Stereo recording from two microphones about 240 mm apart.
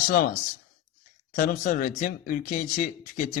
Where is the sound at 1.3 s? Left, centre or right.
Left.